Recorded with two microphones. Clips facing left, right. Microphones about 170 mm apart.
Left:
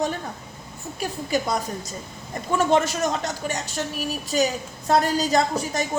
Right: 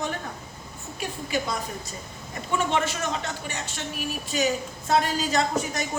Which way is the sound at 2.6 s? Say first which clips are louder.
Left 6 dB; 40° left (ahead or behind).